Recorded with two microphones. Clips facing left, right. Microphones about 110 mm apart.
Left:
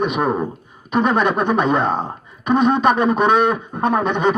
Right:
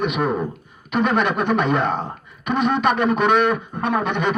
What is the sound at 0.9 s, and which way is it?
A man's voice, 35° left (ahead or behind).